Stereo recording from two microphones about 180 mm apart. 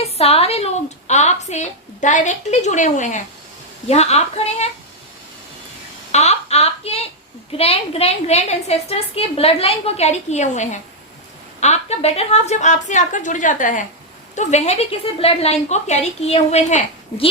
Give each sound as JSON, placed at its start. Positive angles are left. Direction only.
{"t": 0.0, "sound": "a woman's voice", "side_deg": 35}
{"t": 6.1, "sound": "a woman's voice", "side_deg": 40}